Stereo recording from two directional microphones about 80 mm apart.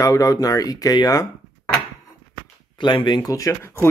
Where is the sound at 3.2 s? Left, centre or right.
Left.